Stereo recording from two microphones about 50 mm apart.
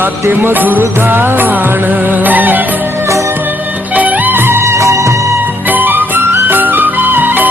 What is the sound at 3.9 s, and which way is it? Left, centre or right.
Music, right.